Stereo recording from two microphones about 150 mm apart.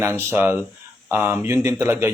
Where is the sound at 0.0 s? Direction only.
15° right (ahead or behind).